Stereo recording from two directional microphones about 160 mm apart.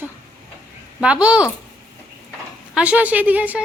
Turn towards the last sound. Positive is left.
turn(degrees=-10)  # may be behind; listen again after turning